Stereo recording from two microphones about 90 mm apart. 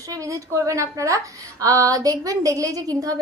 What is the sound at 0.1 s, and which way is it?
A woman's voice, 35° right (ahead or behind).